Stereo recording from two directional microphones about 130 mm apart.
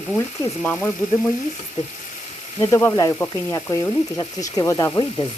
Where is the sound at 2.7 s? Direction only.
20° left (ahead or behind).